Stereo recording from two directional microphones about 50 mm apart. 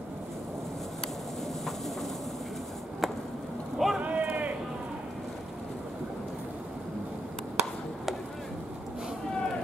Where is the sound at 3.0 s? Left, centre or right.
Centre.